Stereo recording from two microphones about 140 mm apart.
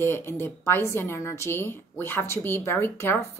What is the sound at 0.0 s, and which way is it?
A woman's voice, 20° left (ahead or behind).